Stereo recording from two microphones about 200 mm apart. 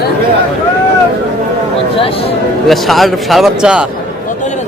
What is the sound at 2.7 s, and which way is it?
A man's voice, centre (ahead or behind).